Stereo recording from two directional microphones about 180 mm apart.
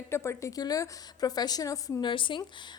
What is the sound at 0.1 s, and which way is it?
A woman's voice, 15° left (ahead or behind).